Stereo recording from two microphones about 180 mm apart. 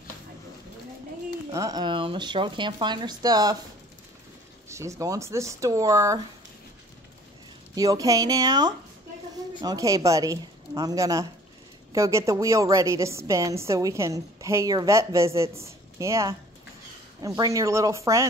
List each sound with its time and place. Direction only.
1.5 s speech: 20° right (ahead or behind)
4.6 s a woman's voice: 15° right (ahead or behind)
7.7 s a woman's voice: 20° right (ahead or behind)
17.4 s a woman's voice: 20° right (ahead or behind)